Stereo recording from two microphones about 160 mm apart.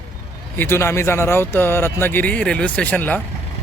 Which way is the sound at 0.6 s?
15° left (ahead or behind).